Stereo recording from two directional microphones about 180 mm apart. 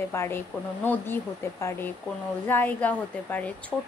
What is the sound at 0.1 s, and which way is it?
A woman's voice, 15° left (ahead or behind).